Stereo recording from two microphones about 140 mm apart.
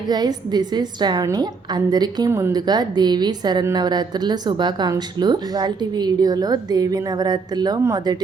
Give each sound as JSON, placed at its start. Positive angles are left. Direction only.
{"t": 0.1, "sound": "a woman's voice", "side_deg": -30}